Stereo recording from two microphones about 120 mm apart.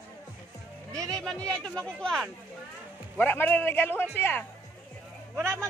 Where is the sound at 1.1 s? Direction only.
5° left (ahead or behind).